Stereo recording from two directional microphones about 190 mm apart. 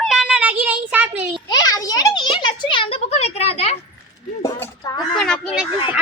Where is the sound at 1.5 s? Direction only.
20° left (ahead or behind).